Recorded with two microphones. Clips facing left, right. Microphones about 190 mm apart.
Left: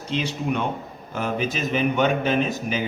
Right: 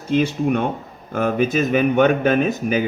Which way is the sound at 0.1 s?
50° right (ahead or behind).